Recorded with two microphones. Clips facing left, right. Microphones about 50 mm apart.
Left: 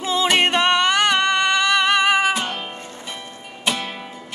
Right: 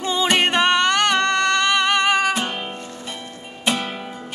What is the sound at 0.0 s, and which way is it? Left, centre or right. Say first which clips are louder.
Music: left 1 dB; centre.